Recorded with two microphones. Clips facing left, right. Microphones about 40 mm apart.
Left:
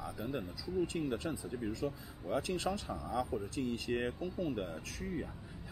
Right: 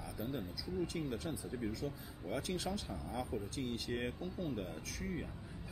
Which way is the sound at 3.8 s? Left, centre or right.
Left.